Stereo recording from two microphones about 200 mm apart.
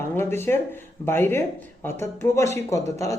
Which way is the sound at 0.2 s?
10° left (ahead or behind).